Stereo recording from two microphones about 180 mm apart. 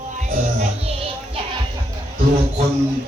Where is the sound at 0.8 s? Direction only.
35° right (ahead or behind).